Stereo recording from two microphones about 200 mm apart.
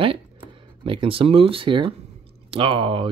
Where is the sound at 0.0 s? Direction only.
25° right (ahead or behind).